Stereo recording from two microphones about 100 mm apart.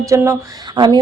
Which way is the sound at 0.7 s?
50° right (ahead or behind).